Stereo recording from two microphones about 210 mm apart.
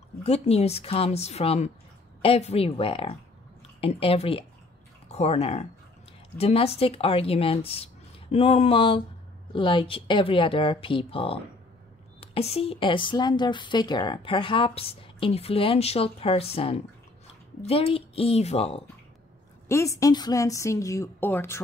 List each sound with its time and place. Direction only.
0.2 s speech: 30° left (ahead or behind)
19.7 s a woman's voice: 15° left (ahead or behind)